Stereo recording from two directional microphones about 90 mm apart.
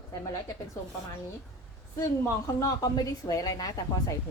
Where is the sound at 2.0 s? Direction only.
35° left (ahead or behind).